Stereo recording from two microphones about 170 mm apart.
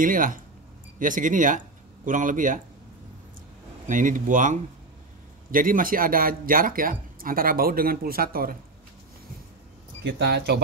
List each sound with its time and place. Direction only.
0.0 s speech: 55° right (ahead or behind)
3.8 s speech: 50° right (ahead or behind)
10.0 s speech: 85° right